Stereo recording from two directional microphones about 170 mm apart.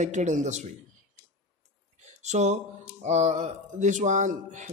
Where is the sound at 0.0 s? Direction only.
45° right (ahead or behind).